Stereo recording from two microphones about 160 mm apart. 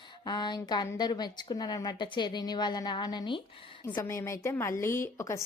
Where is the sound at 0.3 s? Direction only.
25° left (ahead or behind).